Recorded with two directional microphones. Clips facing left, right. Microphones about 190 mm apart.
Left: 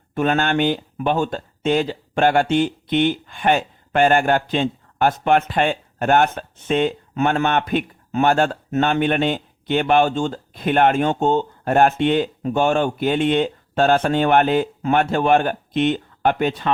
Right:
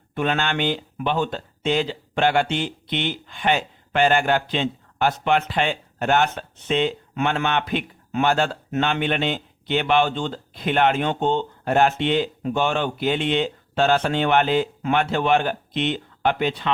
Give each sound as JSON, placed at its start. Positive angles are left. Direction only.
{"t": 0.1, "sound": "speech", "side_deg": 45}